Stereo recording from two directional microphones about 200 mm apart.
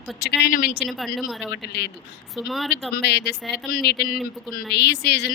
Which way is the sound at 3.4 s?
Centre (ahead or behind).